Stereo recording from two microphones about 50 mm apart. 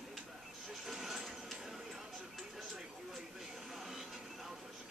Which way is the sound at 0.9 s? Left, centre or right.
Centre.